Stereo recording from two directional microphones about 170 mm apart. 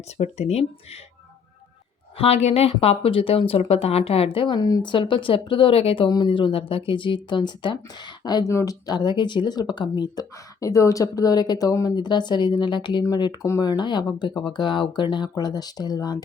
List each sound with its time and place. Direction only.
0.2 s speech: 40° left (ahead or behind)
2.1 s a woman's voice: 35° left (ahead or behind)